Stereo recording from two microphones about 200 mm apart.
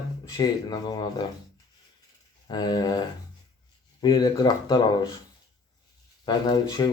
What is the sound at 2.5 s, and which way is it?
Speech, 20° left (ahead or behind).